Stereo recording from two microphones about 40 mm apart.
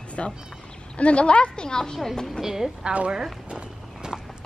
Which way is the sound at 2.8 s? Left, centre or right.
Right.